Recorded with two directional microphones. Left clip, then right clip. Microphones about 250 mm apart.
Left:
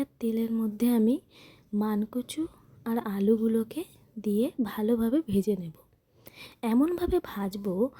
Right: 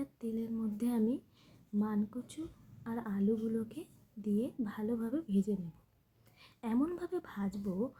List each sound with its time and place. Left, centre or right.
0.0 s a woman's voice: left